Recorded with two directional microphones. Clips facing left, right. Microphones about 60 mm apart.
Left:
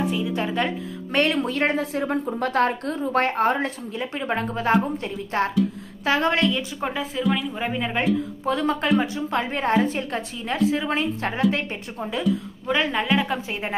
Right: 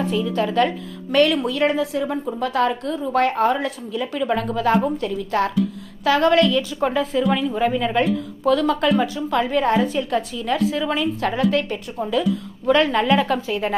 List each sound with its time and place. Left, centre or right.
0.0 s speech: centre
0.3 s a woman's voice: left
6.8 s speech: centre
7.5 s a woman's voice: left
12.6 s a woman's voice: centre
13.5 s a woman's voice: left